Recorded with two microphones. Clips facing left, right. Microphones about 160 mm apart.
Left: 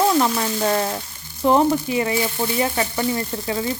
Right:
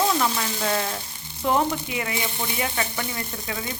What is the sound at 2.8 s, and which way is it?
Speech, 30° left (ahead or behind).